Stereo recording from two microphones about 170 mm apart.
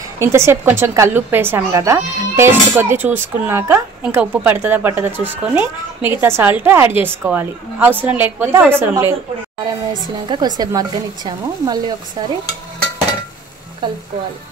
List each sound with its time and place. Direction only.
0.2 s a woman's voice: 15° right (ahead or behind)
10.2 s speech: 25° right (ahead or behind)
13.8 s speech: 25° right (ahead or behind)